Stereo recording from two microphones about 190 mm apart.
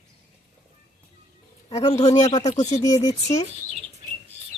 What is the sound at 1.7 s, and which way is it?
Speech, 35° left (ahead or behind).